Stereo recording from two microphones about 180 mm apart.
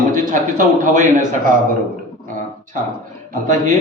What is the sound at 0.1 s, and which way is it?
A man's voice, 45° right (ahead or behind).